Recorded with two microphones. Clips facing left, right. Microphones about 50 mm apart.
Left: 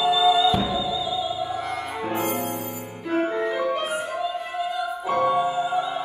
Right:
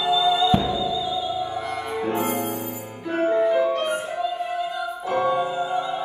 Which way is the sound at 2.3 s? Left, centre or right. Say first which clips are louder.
Right 1 dB; left.